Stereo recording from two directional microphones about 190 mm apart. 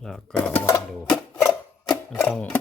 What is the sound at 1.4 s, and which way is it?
Sewing machine, 10° left (ahead or behind).